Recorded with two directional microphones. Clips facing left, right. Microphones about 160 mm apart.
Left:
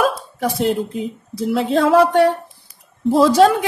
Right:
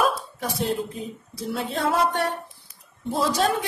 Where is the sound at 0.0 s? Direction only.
90° left.